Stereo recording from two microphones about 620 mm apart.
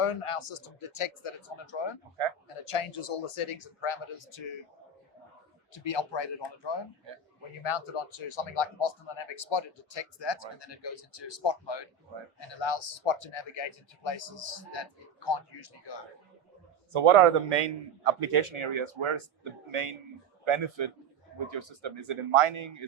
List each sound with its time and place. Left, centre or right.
0.0 s speech: left
5.7 s speech: left
16.9 s speech: right